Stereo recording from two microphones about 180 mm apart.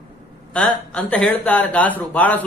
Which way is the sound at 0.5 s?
10° left (ahead or behind).